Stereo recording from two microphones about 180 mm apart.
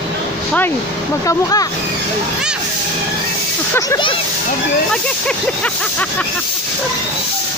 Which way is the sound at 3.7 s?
20° left (ahead or behind).